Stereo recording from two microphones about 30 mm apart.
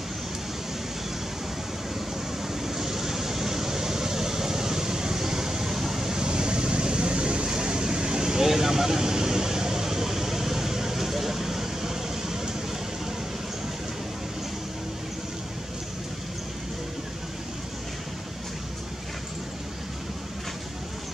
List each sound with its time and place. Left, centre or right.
2.6 s vehicle: centre
6.2 s vehicle: right
8.5 s a sound: centre